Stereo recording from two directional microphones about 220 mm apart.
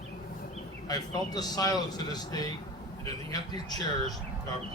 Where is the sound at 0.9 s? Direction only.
15° left (ahead or behind).